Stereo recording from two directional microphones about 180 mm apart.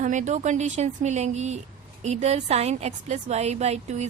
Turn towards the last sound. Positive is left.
turn(degrees=-40)  # may be behind; listen again after turning